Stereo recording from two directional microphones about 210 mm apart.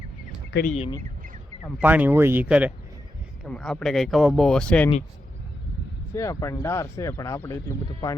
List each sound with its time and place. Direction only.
0.7 s speech: 30° left (ahead or behind)
1.8 s speech: 10° right (ahead or behind)
6.1 s speech: 15° left (ahead or behind)